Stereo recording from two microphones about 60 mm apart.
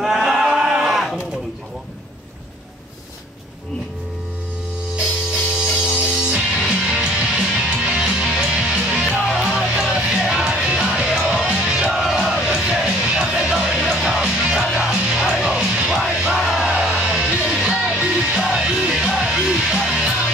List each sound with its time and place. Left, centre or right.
0.0 s a sound: centre
5.8 s music: centre
9.5 s music: centre